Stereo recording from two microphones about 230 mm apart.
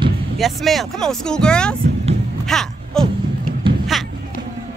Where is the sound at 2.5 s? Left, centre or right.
Centre.